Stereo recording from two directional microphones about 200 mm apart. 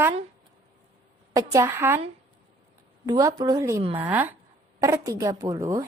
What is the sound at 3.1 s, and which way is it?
A woman's voice, 15° right (ahead or behind).